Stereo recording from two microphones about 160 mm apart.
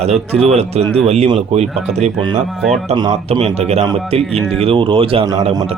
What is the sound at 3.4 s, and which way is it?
Speech, 40° right (ahead or behind).